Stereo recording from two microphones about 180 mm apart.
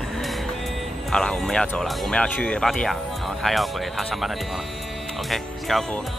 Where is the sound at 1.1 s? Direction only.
5° left (ahead or behind).